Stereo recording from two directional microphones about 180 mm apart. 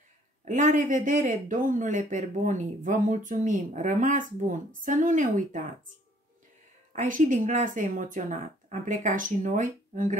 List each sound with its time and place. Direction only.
0.5 s speech: 45° right (ahead or behind)
7.0 s speech: 45° right (ahead or behind)